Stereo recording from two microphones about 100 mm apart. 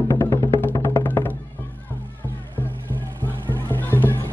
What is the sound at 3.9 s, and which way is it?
Music, 15° left (ahead or behind).